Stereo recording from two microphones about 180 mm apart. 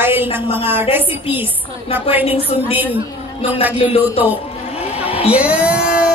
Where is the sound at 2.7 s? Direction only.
10° right (ahead or behind).